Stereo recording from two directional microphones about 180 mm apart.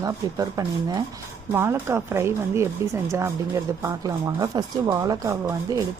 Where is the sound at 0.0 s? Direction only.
20° right (ahead or behind).